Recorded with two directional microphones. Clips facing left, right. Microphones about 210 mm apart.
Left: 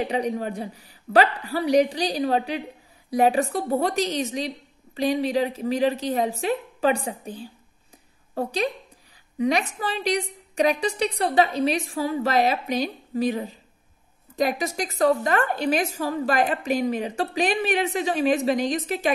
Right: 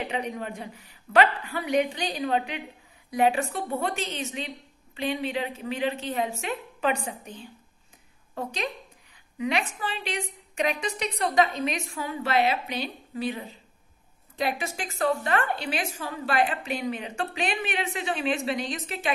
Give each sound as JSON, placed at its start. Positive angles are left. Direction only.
{"t": 0.0, "sound": "a woman's voice", "side_deg": 35}